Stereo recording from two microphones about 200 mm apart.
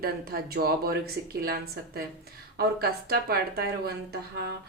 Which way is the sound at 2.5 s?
50° right (ahead or behind).